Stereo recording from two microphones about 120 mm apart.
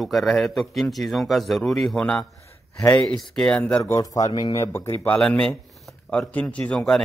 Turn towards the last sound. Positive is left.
turn(degrees=5)  # may be behind; listen again after turning